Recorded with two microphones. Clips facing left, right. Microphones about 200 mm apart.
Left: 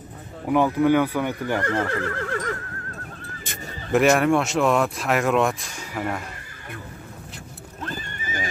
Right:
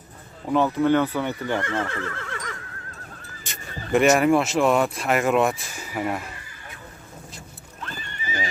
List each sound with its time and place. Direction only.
0.5 s speech: 10° left (ahead or behind)
1.6 s neigh: 40° left (ahead or behind)
3.9 s speech: centre (ahead or behind)
7.8 s horse: 45° left (ahead or behind)